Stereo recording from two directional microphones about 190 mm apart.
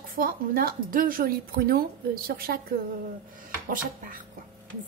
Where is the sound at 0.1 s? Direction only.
50° right (ahead or behind).